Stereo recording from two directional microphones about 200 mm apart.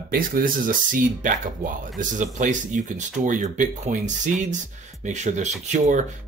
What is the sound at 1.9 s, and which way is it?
Speech, 40° right (ahead or behind).